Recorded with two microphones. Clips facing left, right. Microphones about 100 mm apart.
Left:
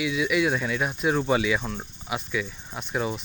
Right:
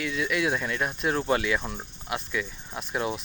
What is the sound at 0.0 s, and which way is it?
Speech, 5° left (ahead or behind).